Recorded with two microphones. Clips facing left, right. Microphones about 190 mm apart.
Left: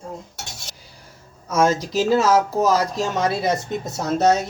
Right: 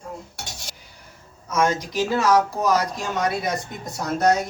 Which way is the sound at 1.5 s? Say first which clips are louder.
Left 3 dB; 30° left (ahead or behind).